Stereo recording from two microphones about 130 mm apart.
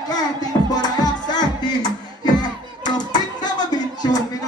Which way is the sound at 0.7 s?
30° left (ahead or behind).